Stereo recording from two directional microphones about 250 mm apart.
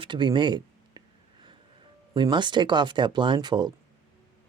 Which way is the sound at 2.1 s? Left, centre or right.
Centre.